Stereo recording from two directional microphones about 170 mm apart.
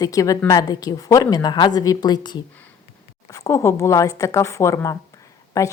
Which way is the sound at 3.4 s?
15° left (ahead or behind).